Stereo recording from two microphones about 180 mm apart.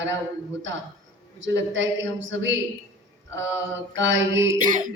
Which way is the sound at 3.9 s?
90° right.